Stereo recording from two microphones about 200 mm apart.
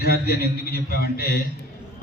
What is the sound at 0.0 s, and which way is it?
A man's voice, 50° left (ahead or behind).